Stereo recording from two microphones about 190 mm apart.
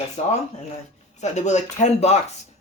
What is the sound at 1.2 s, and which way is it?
Speech, 35° left (ahead or behind).